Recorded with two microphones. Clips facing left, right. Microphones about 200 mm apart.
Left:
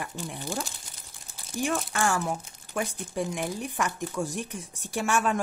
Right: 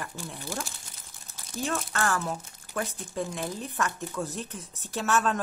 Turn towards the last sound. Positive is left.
turn(degrees=15)  # may be behind; listen again after turning